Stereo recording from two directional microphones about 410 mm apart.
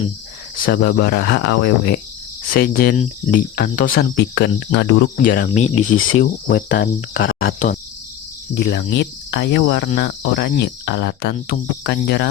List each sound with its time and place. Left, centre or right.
0.6 s cricket: left
6.1 s cricket: left
8.5 s cricket: left